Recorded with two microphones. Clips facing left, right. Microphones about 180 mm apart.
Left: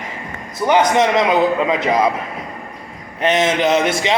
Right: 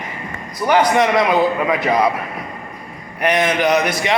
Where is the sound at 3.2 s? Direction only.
25° left (ahead or behind).